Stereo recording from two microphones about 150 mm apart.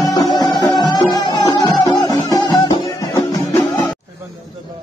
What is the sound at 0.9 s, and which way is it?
Music, 25° left (ahead or behind).